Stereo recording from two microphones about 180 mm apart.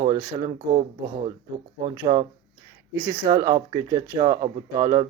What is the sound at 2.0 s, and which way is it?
Speech, 25° right (ahead or behind).